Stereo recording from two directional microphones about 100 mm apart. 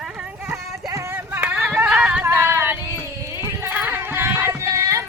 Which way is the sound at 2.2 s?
25° right (ahead or behind).